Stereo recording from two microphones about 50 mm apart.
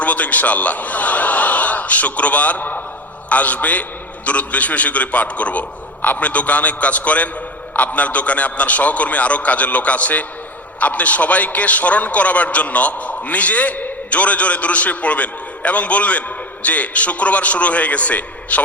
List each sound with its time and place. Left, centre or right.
0.0 s a man's voice: left